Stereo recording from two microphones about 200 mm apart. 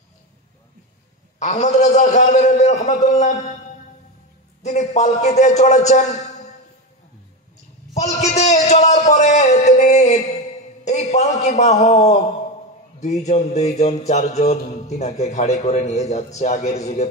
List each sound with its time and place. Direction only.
1.4 s mantra: 35° left (ahead or behind)
4.6 s mantra: 35° left (ahead or behind)
7.9 s a man's voice: 35° left (ahead or behind)
13.0 s mantra: 35° left (ahead or behind)